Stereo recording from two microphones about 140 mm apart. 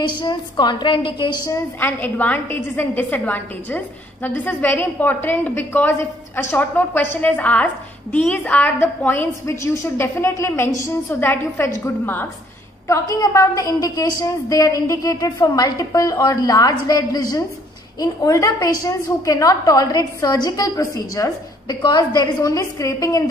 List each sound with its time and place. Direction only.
0.2 s a woman's voice: 35° left (ahead or behind)
1.8 s a woman's voice: 10° left (ahead or behind)